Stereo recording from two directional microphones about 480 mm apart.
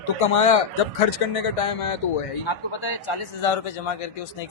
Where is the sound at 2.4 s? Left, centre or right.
Left.